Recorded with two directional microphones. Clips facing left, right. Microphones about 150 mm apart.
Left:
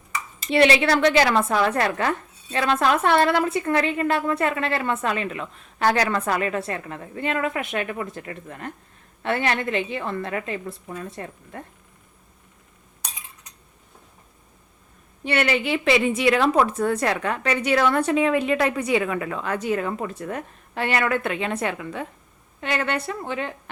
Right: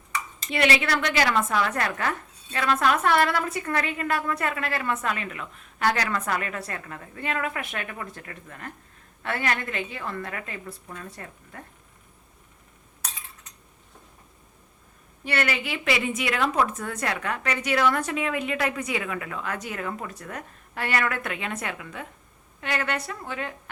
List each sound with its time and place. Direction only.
0.5 s a woman's voice: 30° left (ahead or behind)
5.8 s a woman's voice: 40° left (ahead or behind)
6.1 s a woman's voice: 30° left (ahead or behind)
15.2 s a woman's voice: 25° left (ahead or behind)